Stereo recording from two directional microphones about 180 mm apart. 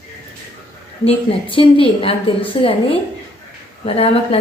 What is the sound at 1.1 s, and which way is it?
A woman's voice, 30° left (ahead or behind).